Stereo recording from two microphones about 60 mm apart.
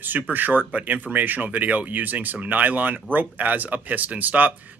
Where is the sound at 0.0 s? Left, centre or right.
Right.